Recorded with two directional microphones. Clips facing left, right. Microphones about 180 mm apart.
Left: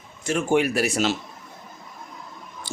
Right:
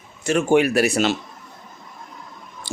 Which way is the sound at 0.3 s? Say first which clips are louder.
Right 4 dB; 70° right (ahead or behind).